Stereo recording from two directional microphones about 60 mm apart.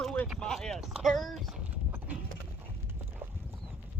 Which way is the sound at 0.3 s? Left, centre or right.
Centre.